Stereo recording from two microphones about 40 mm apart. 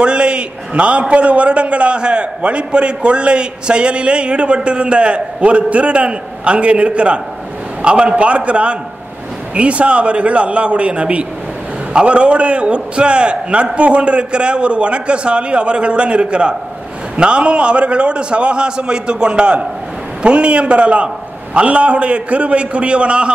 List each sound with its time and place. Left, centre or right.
0.0 s a man's voice: right